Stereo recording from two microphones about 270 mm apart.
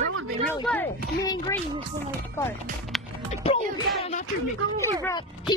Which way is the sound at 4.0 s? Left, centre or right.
Left.